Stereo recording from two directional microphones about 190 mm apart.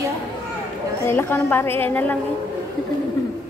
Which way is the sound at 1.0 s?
10° left (ahead or behind).